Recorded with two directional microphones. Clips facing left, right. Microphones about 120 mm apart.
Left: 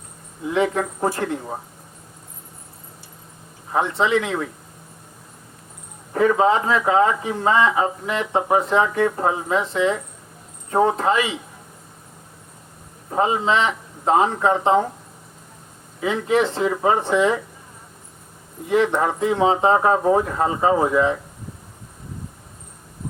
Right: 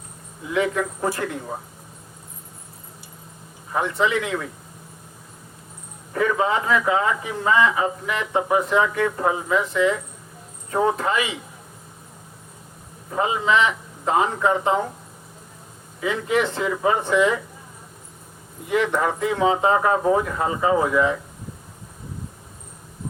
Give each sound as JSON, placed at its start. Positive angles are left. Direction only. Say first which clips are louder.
{"t": 0.5, "sound": "speech", "louder": "left 2 dB", "side_deg": 30}
{"t": 3.7, "sound": "speech", "louder": "left 2 dB", "side_deg": 30}
{"t": 6.1, "sound": "speech", "louder": "left 4 dB", "side_deg": 30}
{"t": 13.1, "sound": "speech", "louder": "left 1 dB", "side_deg": 35}
{"t": 16.0, "sound": "speech", "louder": "left 2 dB", "side_deg": 30}
{"t": 18.7, "sound": "speech", "louder": "left 2 dB", "side_deg": 30}